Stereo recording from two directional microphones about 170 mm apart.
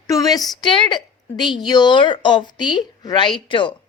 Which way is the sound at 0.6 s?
25° left (ahead or behind).